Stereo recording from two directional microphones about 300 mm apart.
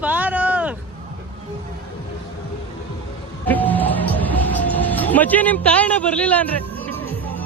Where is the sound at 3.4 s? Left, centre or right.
Centre.